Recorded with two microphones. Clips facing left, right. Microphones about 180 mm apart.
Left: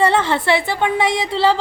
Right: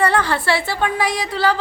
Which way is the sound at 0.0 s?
25° left (ahead or behind).